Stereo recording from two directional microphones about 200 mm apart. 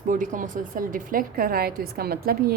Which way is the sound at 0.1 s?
40° right (ahead or behind).